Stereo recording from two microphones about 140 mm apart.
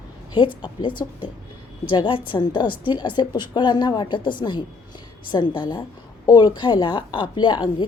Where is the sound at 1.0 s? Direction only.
25° left (ahead or behind).